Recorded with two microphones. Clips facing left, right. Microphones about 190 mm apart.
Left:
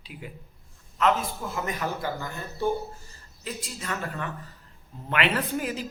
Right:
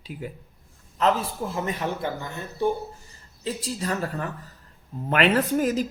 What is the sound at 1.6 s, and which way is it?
A man's voice, 30° right (ahead or behind).